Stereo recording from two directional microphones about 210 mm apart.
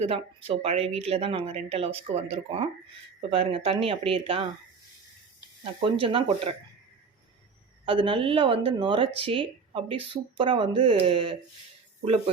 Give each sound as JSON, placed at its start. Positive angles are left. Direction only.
{"t": 0.0, "sound": "speech", "side_deg": -30}
{"t": 6.0, "sound": "speech", "side_deg": -25}
{"t": 7.9, "sound": "speech", "side_deg": -25}